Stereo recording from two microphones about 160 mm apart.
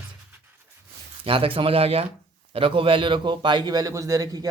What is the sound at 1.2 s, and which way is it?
A man's voice, 35° right (ahead or behind).